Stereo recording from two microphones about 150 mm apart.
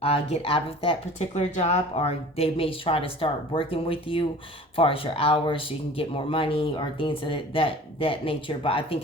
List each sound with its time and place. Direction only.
0.0 s speech: 40° left (ahead or behind)